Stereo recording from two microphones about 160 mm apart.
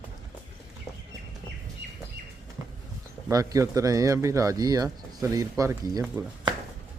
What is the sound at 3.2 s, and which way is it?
Speech, 20° right (ahead or behind).